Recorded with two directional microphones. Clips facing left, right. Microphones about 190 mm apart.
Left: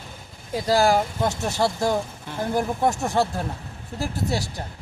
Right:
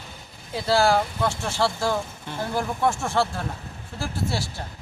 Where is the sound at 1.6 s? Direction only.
20° left (ahead or behind).